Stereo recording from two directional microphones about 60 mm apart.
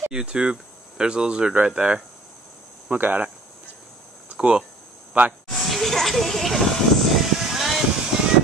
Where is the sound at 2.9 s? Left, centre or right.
Right.